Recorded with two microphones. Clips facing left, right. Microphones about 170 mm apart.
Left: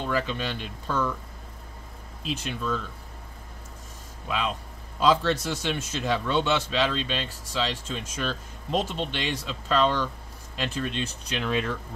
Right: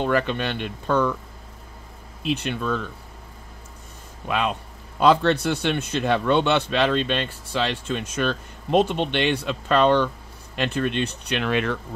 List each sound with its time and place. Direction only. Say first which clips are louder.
0.0 s a man's voice: right 6 dB; 65° right (ahead or behind)
2.2 s a man's voice: right 5 dB; 65° right (ahead or behind)
4.3 s a man's voice: right 5 dB; 60° right (ahead or behind)